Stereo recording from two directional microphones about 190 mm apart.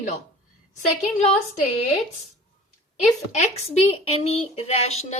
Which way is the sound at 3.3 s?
35° left (ahead or behind).